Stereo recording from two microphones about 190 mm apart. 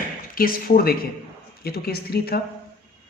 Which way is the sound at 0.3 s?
50° left (ahead or behind).